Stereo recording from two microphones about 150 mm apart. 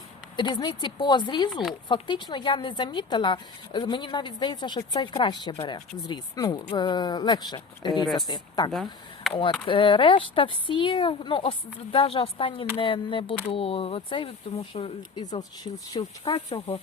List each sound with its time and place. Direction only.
0.3 s speech: 30° left (ahead or behind)
8.7 s speech: centre (ahead or behind)
9.3 s speech: 35° left (ahead or behind)
15.4 s speech: 25° left (ahead or behind)